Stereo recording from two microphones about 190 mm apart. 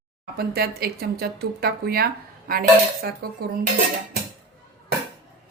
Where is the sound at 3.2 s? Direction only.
55° right (ahead or behind).